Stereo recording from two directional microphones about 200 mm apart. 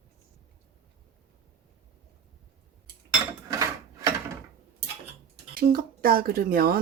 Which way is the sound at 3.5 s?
15° right (ahead or behind).